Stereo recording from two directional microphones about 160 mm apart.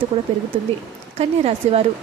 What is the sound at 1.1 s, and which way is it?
Speech, 40° right (ahead or behind).